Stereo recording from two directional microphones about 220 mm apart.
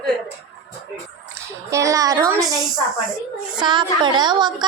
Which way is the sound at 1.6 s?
15° right (ahead or behind).